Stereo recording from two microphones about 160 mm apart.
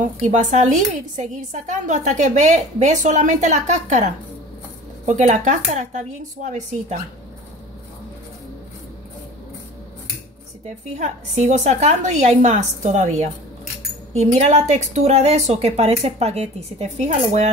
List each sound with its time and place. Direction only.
0.0 s a woman's voice: 50° right (ahead or behind)
11.0 s a woman's voice: 45° right (ahead or behind)